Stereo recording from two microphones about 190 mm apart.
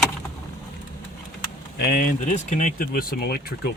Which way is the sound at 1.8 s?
50° left (ahead or behind).